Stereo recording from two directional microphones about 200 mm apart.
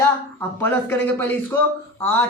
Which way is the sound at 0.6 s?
10° left (ahead or behind).